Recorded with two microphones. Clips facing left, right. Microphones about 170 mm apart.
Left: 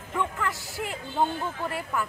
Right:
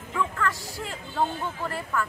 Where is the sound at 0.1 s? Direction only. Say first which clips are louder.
Right 1 dB; 25° left (ahead or behind).